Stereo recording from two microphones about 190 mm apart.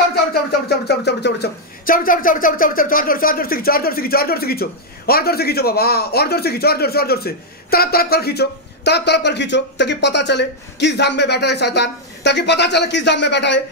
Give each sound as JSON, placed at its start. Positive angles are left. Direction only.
{"t": 0.1, "sound": "speech", "side_deg": 55}